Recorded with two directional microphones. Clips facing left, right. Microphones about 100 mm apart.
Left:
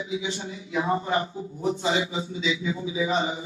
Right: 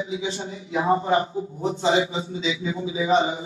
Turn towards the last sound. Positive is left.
turn(degrees=-30)  # may be behind; listen again after turning